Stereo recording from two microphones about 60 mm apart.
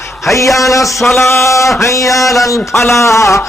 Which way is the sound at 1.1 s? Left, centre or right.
Left.